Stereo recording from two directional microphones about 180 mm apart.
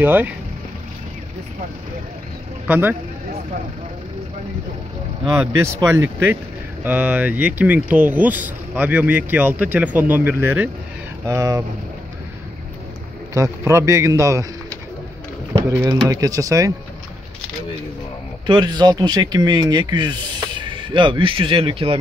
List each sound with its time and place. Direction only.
0.0 s speech: 10° right (ahead or behind)
2.6 s speech: 10° right (ahead or behind)
5.2 s speech: 15° right (ahead or behind)
13.3 s speech: 15° right (ahead or behind)
15.5 s speech: 20° right (ahead or behind)
18.5 s speech: 25° right (ahead or behind)